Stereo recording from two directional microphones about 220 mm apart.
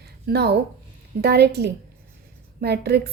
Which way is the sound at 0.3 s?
50° right (ahead or behind).